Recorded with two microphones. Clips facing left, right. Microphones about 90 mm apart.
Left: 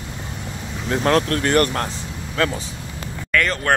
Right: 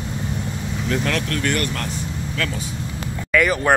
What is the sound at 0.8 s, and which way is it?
Speech, 35° left (ahead or behind).